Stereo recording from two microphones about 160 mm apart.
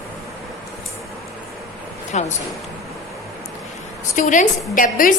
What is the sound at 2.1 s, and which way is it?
Speech, 45° left (ahead or behind).